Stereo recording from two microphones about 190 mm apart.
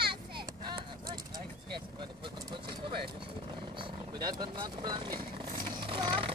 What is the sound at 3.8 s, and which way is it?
Vehicle, 25° right (ahead or behind).